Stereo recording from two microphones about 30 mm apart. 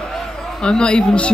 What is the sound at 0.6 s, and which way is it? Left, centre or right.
Speech, left.